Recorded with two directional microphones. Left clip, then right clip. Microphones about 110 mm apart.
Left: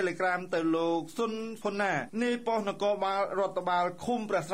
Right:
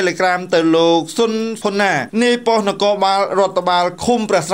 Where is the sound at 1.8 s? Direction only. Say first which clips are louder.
Right 15 dB; 35° right (ahead or behind).